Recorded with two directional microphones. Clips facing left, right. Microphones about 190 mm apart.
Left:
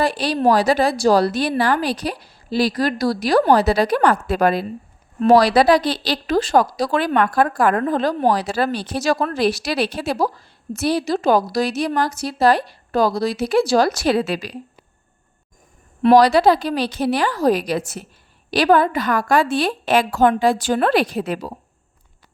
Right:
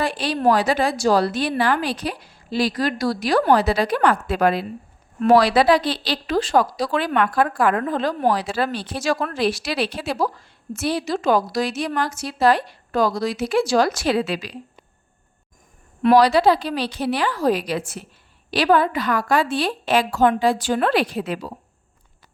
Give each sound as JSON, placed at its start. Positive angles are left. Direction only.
{"t": 0.0, "sound": "speech", "side_deg": 40}
{"t": 16.1, "sound": "a woman's voice", "side_deg": 45}